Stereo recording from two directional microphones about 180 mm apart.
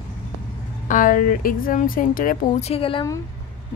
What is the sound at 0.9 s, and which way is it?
A woman's voice, 50° left (ahead or behind).